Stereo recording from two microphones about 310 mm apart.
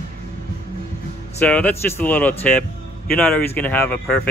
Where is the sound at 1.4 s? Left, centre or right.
Centre.